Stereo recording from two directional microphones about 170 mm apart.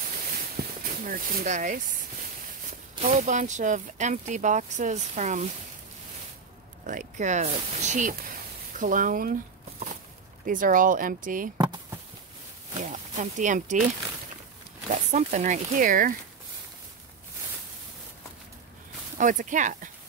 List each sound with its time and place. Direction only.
0.8 s speech: 55° right (ahead or behind)
3.1 s speech: 45° right (ahead or behind)
6.9 s speech: 45° right (ahead or behind)
10.4 s speech: 50° right (ahead or behind)
11.5 s chop: 25° right (ahead or behind)
12.9 s speech: 45° right (ahead or behind)
14.9 s speech: 45° right (ahead or behind)
19.1 s speech: 50° right (ahead or behind)